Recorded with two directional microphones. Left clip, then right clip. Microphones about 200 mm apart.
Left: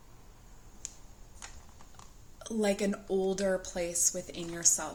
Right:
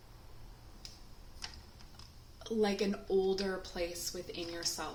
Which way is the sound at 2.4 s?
40° left (ahead or behind).